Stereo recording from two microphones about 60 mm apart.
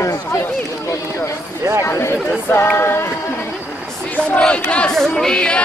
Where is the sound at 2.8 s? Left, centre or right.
Left.